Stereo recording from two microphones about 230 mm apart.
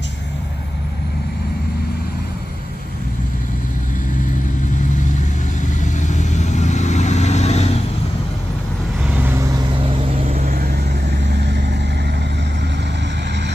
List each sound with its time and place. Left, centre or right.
5.9 s vehicle: left
10.2 s vehicle: right